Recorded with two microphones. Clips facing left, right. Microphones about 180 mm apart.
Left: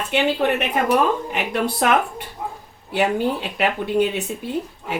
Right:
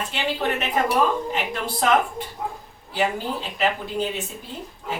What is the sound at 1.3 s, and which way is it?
Speech, 65° left (ahead or behind).